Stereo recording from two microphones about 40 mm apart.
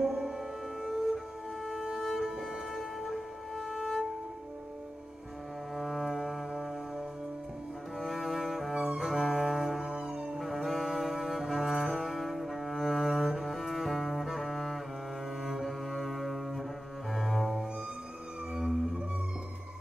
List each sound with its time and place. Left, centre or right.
0.0 s music: centre
5.8 s music: centre
8.0 s cello: centre
8.7 s cello: centre
9.8 s music: centre
10.4 s music: centre
15.4 s cello: centre
18.5 s whale vocalization: centre